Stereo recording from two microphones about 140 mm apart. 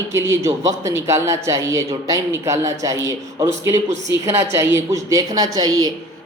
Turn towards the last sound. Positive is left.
turn(degrees=-25)  # may be behind; listen again after turning